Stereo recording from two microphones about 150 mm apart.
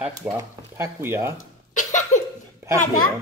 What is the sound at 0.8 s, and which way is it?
Speech, 15° right (ahead or behind).